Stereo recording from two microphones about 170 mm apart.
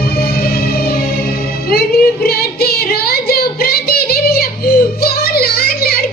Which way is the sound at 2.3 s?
65° left (ahead or behind).